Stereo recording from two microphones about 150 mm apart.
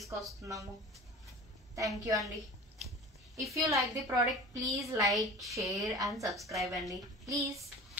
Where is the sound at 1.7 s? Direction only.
20° right (ahead or behind).